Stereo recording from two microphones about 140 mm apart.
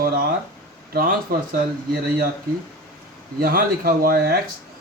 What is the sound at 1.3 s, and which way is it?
Speech, 90° right.